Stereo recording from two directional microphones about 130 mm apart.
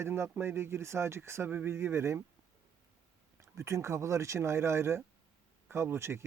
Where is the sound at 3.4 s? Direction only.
25° right (ahead or behind).